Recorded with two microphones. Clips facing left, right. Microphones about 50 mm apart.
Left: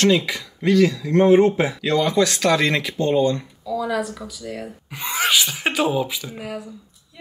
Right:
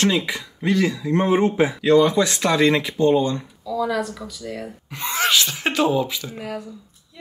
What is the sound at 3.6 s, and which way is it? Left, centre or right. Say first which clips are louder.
Speech: even; centre.